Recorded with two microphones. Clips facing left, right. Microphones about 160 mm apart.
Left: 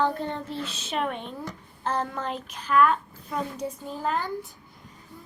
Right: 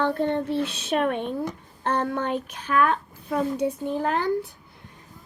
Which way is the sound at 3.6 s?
65° right (ahead or behind).